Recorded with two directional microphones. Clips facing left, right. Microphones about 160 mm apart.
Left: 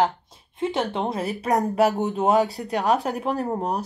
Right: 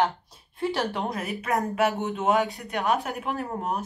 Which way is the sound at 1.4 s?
40° left (ahead or behind).